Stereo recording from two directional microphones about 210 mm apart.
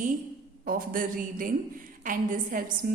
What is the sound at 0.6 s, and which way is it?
A woman's voice, 45° right (ahead or behind).